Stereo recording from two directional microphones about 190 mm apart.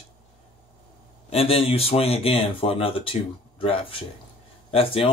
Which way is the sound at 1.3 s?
30° left (ahead or behind).